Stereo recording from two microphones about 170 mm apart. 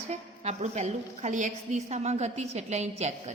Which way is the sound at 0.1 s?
40° right (ahead or behind).